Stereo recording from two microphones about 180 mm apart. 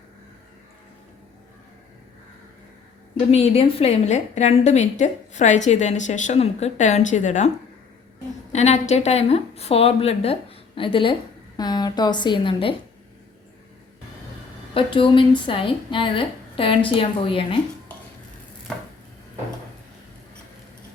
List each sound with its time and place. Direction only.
3.3 s a woman's voice: 35° left (ahead or behind)
8.5 s a woman's voice: 40° left (ahead or behind)
14.7 s speech: 30° left (ahead or behind)